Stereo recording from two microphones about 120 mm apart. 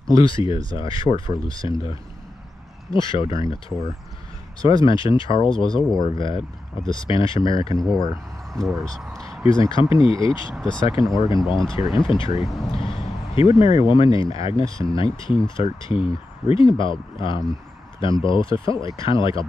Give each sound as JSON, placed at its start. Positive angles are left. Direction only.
{"t": 0.1, "sound": "speech", "side_deg": 45}
{"t": 8.5, "sound": "speech", "side_deg": 5}
{"t": 9.5, "sound": "speech", "side_deg": 45}
{"t": 10.5, "sound": "speech", "side_deg": 0}
{"t": 10.8, "sound": "speech", "side_deg": 45}
{"t": 14.6, "sound": "speech", "side_deg": -30}
{"t": 15.0, "sound": "speech", "side_deg": 40}